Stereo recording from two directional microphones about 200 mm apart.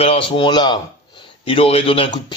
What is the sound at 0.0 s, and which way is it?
Speech, 30° left (ahead or behind).